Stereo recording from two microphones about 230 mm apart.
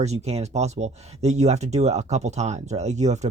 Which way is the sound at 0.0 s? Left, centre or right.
Right.